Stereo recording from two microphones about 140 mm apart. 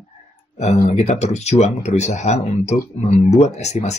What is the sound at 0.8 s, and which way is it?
Speech, 55° left (ahead or behind).